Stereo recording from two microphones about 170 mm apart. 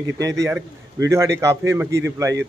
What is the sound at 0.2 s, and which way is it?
A man's voice, 20° right (ahead or behind).